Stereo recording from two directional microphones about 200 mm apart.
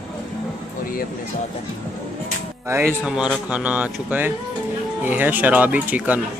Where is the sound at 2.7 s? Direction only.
10° right (ahead or behind).